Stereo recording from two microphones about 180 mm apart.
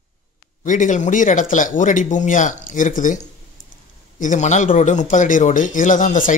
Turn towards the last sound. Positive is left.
turn(degrees=45)  # may be behind; listen again after turning